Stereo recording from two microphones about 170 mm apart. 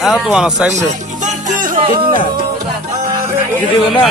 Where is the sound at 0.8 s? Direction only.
45° right (ahead or behind).